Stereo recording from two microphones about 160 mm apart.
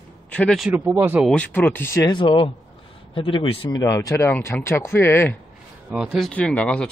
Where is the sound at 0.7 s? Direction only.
10° right (ahead or behind).